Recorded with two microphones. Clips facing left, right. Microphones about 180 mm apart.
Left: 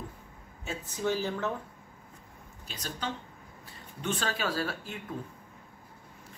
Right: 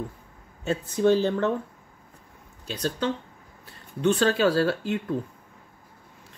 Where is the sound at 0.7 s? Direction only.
65° right (ahead or behind).